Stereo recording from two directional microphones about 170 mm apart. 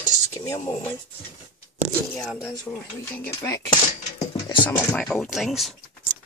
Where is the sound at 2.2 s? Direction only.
Centre (ahead or behind).